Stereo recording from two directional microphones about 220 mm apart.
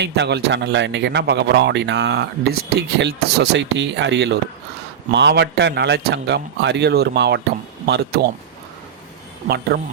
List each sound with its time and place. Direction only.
0.0 s speech: 50° right (ahead or behind)